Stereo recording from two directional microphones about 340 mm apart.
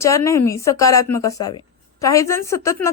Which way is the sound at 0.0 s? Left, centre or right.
Centre.